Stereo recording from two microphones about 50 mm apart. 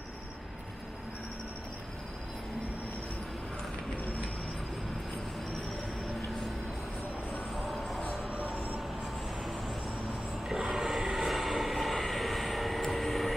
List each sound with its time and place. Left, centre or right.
7.5 s music: centre
8.3 s music: right
10.7 s vehicle: centre